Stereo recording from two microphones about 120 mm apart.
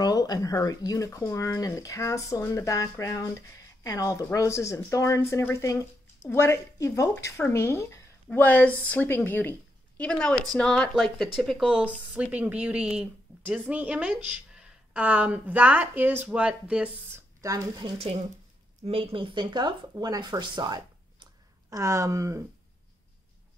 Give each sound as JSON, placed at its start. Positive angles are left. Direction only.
{"t": 0.0, "sound": "a woman's voice", "side_deg": 35}
{"t": 11.6, "sound": "a woman's voice", "side_deg": -10}
{"t": 17.1, "sound": "speech", "side_deg": -25}
{"t": 17.8, "sound": "speech", "side_deg": -55}